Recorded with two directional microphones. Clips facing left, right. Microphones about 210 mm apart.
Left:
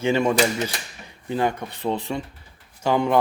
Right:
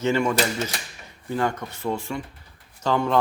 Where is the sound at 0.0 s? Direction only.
20° left (ahead or behind).